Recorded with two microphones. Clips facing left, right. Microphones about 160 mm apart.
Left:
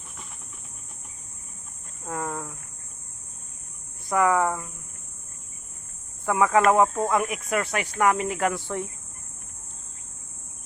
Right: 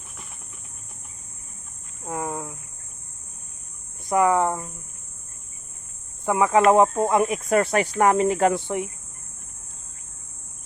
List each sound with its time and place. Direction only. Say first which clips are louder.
2.0 s speech: right 2 dB; 15° right (ahead or behind)
4.1 s speech: right 2 dB; 20° right (ahead or behind)
6.2 s speech: right 2 dB; 20° right (ahead or behind)